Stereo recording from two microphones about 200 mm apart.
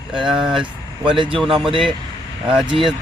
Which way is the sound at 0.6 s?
25° right (ahead or behind).